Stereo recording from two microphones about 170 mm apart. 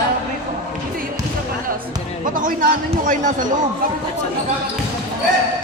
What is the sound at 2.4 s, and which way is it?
A man's voice, 55° right (ahead or behind).